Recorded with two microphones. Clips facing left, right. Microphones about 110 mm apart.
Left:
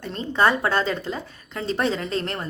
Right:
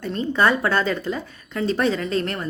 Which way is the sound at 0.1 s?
30° left (ahead or behind).